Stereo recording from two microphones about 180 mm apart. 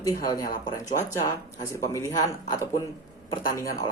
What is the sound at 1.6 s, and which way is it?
Speech, 15° left (ahead or behind).